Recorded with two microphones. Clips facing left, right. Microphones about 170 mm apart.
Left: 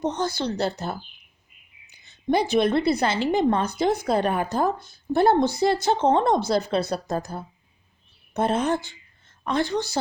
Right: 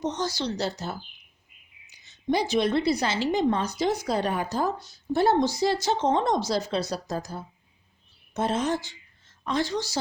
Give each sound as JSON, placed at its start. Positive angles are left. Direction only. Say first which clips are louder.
{"t": 0.0, "sound": "a woman's voice", "louder": "left 3 dB", "side_deg": 55}